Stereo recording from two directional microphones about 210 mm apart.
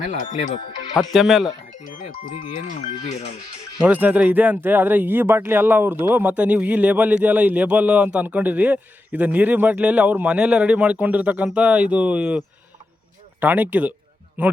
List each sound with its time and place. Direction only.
0.0 s speech: 35° left (ahead or behind)
0.9 s speech: centre (ahead or behind)
1.8 s speech: 35° left (ahead or behind)
3.8 s speech: 5° right (ahead or behind)
13.4 s speech: 10° right (ahead or behind)